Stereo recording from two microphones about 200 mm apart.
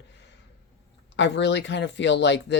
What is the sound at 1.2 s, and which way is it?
Speech, 65° left (ahead or behind).